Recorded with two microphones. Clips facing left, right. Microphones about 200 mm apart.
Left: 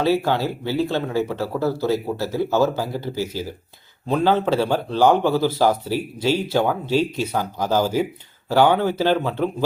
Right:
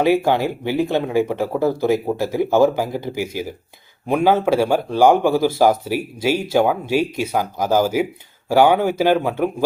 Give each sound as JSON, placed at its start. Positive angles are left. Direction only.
{"t": 0.0, "sound": "speech", "side_deg": -15}